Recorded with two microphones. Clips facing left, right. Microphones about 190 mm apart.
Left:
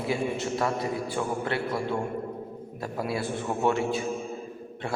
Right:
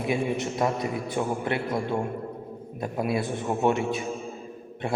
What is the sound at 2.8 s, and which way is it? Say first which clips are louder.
A man's voice: right 3 dB; 20° right (ahead or behind).